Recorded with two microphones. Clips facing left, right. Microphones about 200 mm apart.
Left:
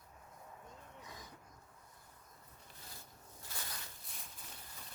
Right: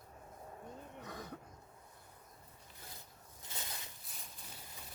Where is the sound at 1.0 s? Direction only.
60° right (ahead or behind).